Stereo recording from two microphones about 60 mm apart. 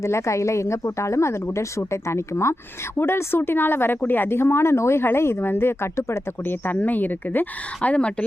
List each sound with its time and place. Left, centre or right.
0.0 s a woman's voice: left
6.4 s a woman's voice: left
7.8 s a woman's voice: centre